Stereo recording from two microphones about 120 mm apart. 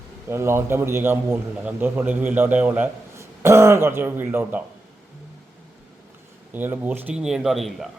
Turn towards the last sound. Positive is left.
turn(degrees=0)  # may be behind; listen again after turning